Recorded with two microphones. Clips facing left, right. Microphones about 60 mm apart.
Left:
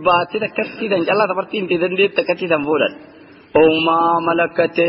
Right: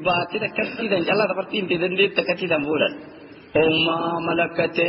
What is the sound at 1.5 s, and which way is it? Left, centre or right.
Speech, left.